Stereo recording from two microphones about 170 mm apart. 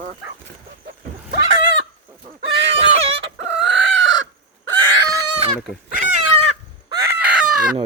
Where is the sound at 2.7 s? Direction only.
35° right (ahead or behind).